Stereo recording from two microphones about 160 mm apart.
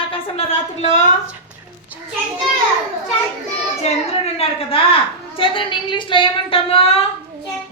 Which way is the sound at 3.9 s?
40° left (ahead or behind).